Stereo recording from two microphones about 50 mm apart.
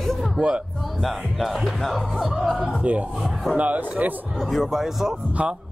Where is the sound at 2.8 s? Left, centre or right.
Right.